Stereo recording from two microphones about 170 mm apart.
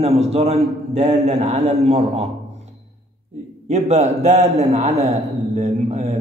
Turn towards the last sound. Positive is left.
turn(degrees=-40)  # may be behind; listen again after turning